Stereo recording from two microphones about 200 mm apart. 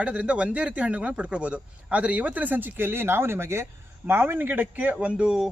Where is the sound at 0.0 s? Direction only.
5° right (ahead or behind).